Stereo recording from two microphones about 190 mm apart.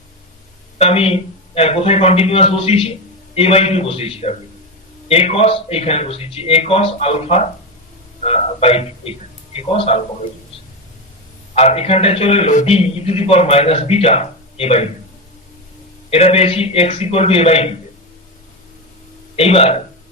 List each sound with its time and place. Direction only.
0.8 s a man's voice: 30° left (ahead or behind)
11.5 s a man's voice: 35° left (ahead or behind)
16.0 s a man's voice: 30° left (ahead or behind)
19.4 s a man's voice: 30° left (ahead or behind)